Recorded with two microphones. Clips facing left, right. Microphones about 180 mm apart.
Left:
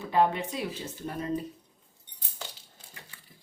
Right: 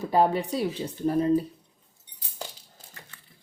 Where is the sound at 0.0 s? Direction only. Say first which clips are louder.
Right 3 dB; 35° right (ahead or behind).